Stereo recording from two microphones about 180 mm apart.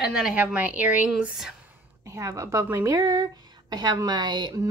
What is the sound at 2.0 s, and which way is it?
Speech, 15° right (ahead or behind).